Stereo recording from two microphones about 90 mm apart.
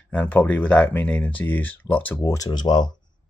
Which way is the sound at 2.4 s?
50° left (ahead or behind).